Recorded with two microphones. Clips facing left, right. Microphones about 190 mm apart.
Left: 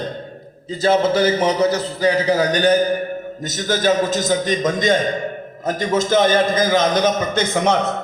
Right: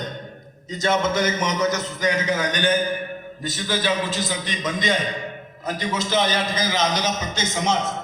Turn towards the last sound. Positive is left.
turn(degrees=60)  # may be behind; listen again after turning